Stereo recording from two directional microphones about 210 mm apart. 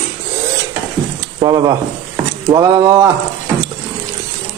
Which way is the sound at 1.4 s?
20° right (ahead or behind).